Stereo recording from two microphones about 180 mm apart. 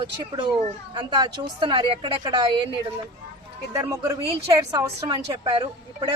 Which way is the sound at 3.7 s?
15° right (ahead or behind).